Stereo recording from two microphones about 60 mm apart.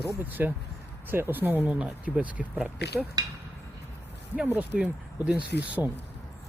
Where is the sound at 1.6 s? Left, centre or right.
Centre.